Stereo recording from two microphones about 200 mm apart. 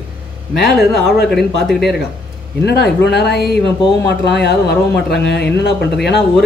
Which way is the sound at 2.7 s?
55° left (ahead or behind).